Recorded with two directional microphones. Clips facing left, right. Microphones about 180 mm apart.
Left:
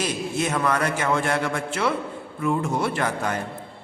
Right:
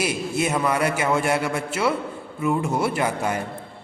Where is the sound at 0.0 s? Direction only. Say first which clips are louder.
Right 2 dB; 10° right (ahead or behind).